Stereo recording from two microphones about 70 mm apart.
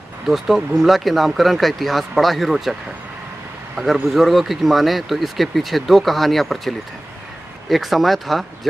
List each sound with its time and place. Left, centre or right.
0.3 s speech: centre
3.7 s speech: centre
7.7 s speech: centre